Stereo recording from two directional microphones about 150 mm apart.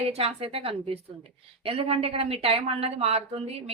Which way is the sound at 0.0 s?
40° right (ahead or behind).